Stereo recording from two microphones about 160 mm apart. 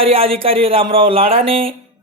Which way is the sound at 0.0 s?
35° right (ahead or behind).